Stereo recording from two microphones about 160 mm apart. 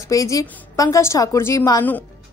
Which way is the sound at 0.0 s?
20° left (ahead or behind).